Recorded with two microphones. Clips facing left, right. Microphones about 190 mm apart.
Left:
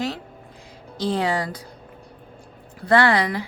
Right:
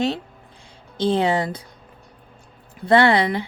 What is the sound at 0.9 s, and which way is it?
Speech, 25° right (ahead or behind).